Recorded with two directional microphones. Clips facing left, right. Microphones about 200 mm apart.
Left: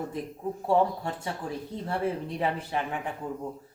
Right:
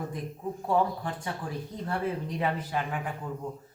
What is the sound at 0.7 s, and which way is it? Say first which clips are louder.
Speech: left 2 dB; 25° left (ahead or behind).